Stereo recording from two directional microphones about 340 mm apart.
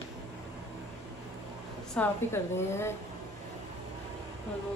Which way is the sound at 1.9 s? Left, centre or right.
Centre.